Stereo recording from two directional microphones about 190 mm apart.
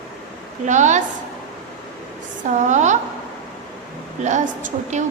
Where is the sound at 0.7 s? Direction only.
40° right (ahead or behind).